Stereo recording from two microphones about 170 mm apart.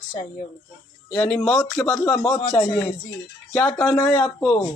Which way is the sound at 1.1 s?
5° left (ahead or behind).